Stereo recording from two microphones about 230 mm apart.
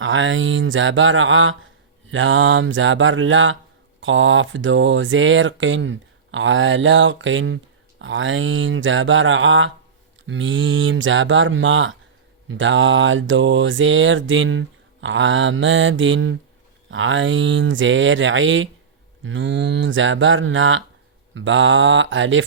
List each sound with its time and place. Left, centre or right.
0.0 s speech: right